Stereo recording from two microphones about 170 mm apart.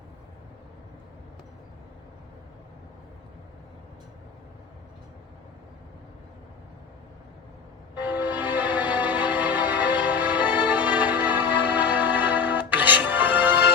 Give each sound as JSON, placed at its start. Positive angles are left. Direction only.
{"t": 7.9, "sound": "music", "side_deg": -10}